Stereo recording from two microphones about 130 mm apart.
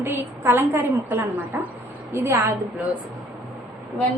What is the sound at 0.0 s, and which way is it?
A woman's voice, 15° right (ahead or behind).